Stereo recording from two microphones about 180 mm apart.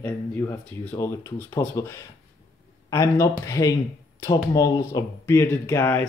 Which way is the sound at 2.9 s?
15° left (ahead or behind).